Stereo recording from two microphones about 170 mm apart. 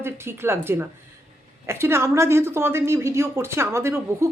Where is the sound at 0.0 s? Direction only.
15° right (ahead or behind).